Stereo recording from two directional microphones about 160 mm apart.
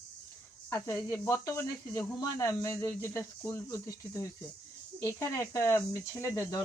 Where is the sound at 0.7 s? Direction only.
15° left (ahead or behind).